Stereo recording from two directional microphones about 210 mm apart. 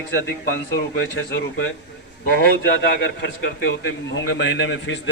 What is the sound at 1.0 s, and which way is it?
Speech, 55° left (ahead or behind).